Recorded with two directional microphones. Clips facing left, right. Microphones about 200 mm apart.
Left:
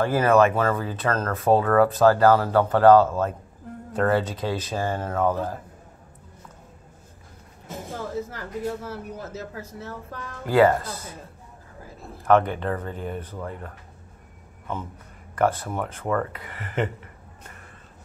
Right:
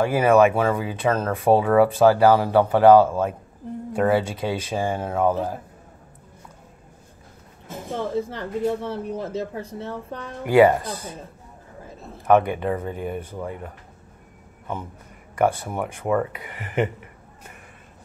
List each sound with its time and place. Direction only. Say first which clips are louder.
0.0 s speech: right 2 dB; 10° right (ahead or behind)
7.9 s speech: right 6 dB; 25° right (ahead or behind)
12.3 s speech: right 2 dB; 10° right (ahead or behind)
15.3 s speech: right 2 dB; 10° right (ahead or behind)